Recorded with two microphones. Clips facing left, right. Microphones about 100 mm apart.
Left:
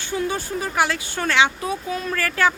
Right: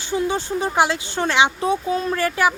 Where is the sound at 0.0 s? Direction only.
20° right (ahead or behind).